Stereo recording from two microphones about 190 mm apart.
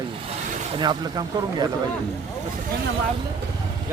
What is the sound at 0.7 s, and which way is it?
Speech, 25° right (ahead or behind).